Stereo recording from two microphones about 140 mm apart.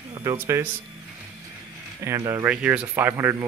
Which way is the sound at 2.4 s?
10° right (ahead or behind).